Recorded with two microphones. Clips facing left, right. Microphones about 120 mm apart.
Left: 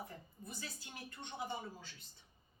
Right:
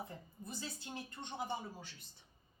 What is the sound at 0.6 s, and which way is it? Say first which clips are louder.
Speech: right 4 dB; 25° right (ahead or behind).